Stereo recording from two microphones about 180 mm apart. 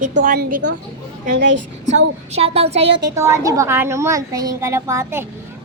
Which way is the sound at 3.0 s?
15° right (ahead or behind).